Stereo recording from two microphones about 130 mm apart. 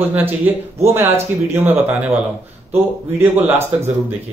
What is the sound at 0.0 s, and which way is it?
Speech, 15° right (ahead or behind).